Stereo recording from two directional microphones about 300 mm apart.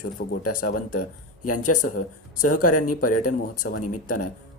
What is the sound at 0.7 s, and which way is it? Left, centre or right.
Speech, left.